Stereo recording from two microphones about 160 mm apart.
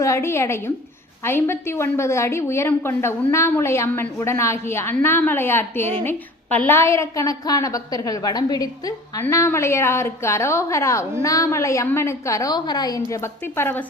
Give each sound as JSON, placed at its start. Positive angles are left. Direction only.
{"t": 0.0, "sound": "a woman's voice", "side_deg": 15}